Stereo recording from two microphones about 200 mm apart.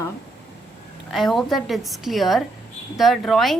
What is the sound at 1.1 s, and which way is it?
A woman's voice, centre (ahead or behind).